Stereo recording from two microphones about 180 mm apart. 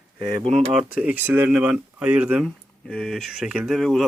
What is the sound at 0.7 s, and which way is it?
Speech, 5° right (ahead or behind).